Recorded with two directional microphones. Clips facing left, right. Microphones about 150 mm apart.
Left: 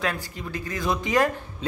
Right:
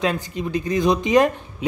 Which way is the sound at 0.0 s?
20° right (ahead or behind).